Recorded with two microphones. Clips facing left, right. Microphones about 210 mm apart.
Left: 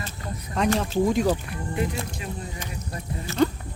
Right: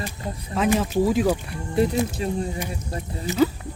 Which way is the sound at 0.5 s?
5° right (ahead or behind).